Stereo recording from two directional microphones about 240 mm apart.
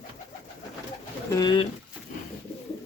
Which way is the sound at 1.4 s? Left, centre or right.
Centre.